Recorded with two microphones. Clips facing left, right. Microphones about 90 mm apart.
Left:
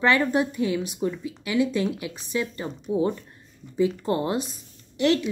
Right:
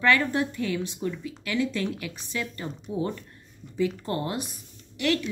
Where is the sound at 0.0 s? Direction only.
20° left (ahead or behind).